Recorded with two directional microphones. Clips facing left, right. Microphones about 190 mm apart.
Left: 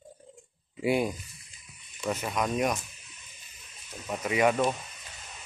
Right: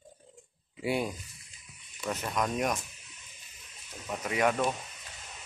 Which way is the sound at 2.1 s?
5° left (ahead or behind).